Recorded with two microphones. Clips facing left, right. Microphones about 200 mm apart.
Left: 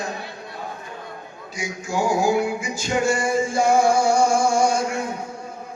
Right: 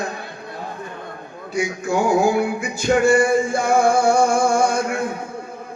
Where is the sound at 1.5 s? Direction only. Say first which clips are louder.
Right 6 dB; 55° right (ahead or behind).